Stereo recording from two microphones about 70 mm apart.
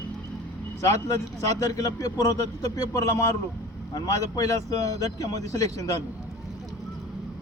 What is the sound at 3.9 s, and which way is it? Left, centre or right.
A man's voice, left.